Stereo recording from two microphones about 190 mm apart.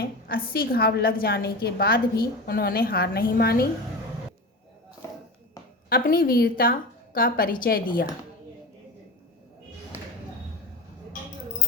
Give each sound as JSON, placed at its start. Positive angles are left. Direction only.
{"t": 0.0, "sound": "a woman's voice", "side_deg": 50}
{"t": 5.9, "sound": "a woman's voice", "side_deg": 50}